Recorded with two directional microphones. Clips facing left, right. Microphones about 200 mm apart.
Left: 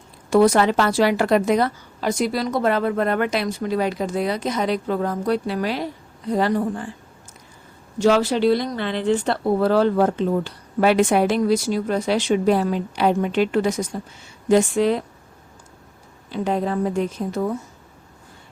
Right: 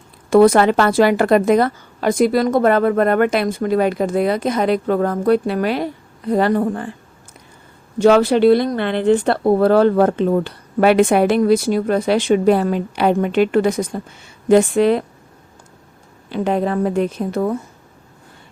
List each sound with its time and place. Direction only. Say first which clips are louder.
0.3 s a woman's voice: right 5 dB; 55° right (ahead or behind)
7.9 s speech: right 5 dB; 55° right (ahead or behind)
16.3 s speech: right 4 dB; 65° right (ahead or behind)